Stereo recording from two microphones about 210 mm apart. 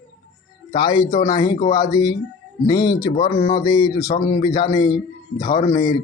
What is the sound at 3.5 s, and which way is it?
A man's voice, 20° left (ahead or behind).